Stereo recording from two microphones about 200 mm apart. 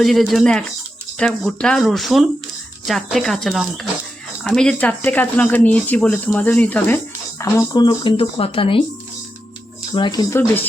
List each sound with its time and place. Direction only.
0.0 s speech: centre (ahead or behind); by 8.8 s 25° left (ahead or behind)
9.9 s speech: 20° left (ahead or behind)